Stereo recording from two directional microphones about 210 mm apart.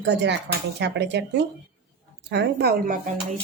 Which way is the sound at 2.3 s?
50° right (ahead or behind).